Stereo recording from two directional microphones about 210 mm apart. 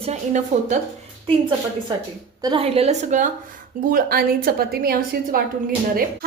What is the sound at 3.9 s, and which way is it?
A woman's voice, 45° right (ahead or behind).